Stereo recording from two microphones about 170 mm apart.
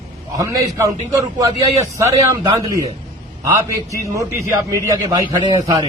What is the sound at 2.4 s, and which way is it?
Speech, 20° right (ahead or behind).